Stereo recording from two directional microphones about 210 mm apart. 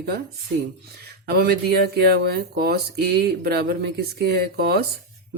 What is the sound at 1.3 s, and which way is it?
Speech, 45° right (ahead or behind).